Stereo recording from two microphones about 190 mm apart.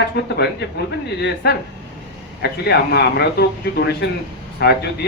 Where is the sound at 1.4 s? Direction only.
60° left (ahead or behind).